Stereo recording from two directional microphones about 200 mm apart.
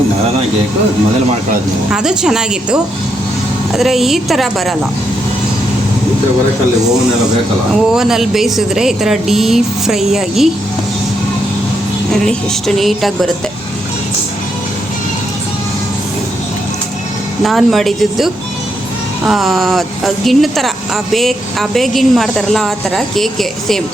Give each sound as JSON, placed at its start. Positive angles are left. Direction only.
{"t": 1.9, "sound": "a woman's voice", "side_deg": -5}
{"t": 7.7, "sound": "a woman's voice", "side_deg": 0}
{"t": 12.2, "sound": "a woman's voice", "side_deg": 0}
{"t": 17.4, "sound": "a woman's voice", "side_deg": 0}